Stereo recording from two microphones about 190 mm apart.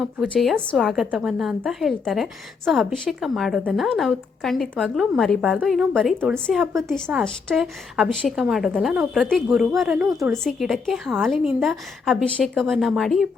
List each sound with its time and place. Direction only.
0.0 s a woman's voice: centre (ahead or behind)
10.1 s a woman's voice: 15° right (ahead or behind)
10.4 s a woman's voice: centre (ahead or behind)